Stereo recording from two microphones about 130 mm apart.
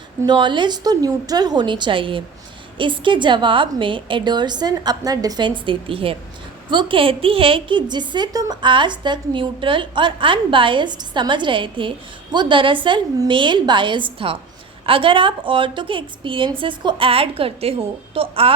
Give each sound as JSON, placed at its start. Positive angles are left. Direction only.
{"t": 0.3, "sound": "a woman's voice", "side_deg": -35}